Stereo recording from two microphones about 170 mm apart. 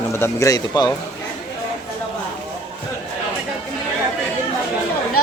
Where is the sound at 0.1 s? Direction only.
15° left (ahead or behind).